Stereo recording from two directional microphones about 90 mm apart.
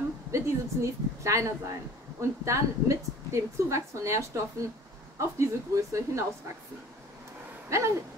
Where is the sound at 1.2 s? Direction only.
35° right (ahead or behind).